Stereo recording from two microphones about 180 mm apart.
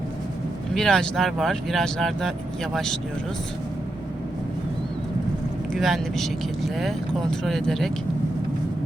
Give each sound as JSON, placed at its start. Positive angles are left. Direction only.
{"t": 0.7, "sound": "speech", "side_deg": 5}
{"t": 5.7, "sound": "speech", "side_deg": 0}